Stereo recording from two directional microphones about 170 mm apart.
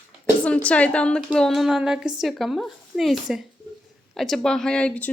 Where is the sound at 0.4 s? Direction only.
10° left (ahead or behind).